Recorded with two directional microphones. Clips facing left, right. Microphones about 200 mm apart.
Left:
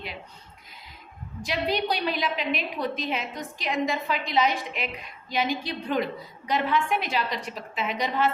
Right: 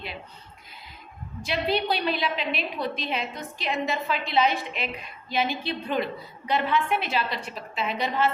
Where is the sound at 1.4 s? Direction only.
15° left (ahead or behind).